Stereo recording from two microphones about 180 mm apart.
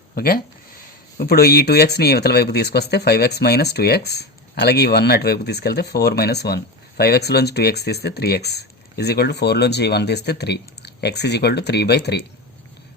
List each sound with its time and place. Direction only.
1.2 s speech: 60° left (ahead or behind)